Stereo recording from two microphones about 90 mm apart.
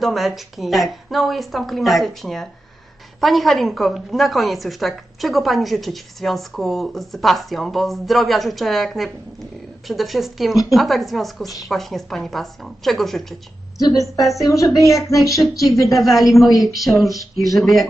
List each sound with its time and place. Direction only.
0.0 s a woman's voice: centre (ahead or behind)
13.7 s a woman's voice: 40° left (ahead or behind)
14.2 s a woman's voice: centre (ahead or behind)
14.4 s a woman's voice: 40° left (ahead or behind)
14.9 s a woman's voice: centre (ahead or behind)